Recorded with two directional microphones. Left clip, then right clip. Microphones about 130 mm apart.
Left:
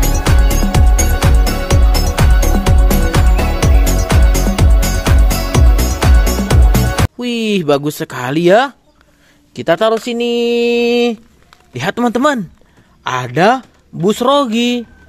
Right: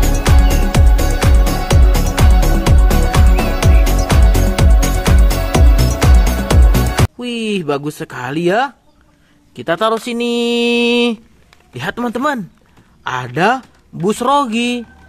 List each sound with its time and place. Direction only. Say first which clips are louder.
0.2 s music: even; centre (ahead or behind)
7.2 s speech: left 3 dB; 30° left (ahead or behind)
9.9 s mantra: left 2 dB; 5° left (ahead or behind)
11.5 s speech: left 4 dB; 35° left (ahead or behind)
13.0 s a man's voice: left 3 dB; 30° left (ahead or behind)